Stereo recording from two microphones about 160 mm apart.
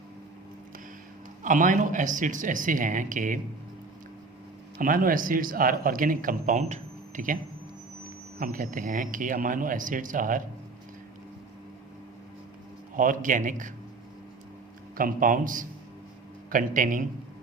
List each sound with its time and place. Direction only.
1.5 s speech: 55° right (ahead or behind)
4.8 s speech: 60° right (ahead or behind)
8.4 s speech: 60° right (ahead or behind)
13.0 s speech: 55° right (ahead or behind)
14.9 s speech: 60° right (ahead or behind)